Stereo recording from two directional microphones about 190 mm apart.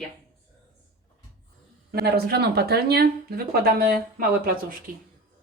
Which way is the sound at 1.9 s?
55° right (ahead or behind).